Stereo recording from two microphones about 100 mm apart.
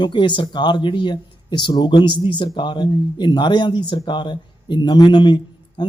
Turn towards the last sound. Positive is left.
turn(degrees=50)  # may be behind; listen again after turning